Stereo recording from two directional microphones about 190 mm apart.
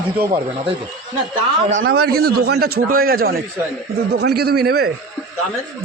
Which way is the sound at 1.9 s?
55° right (ahead or behind).